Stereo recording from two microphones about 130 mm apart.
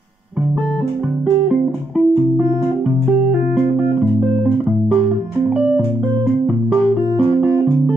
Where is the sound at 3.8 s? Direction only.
5° right (ahead or behind).